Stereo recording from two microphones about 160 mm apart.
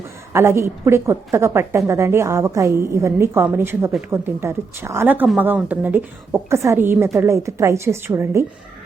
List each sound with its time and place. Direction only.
0.3 s a woman's voice: 15° right (ahead or behind)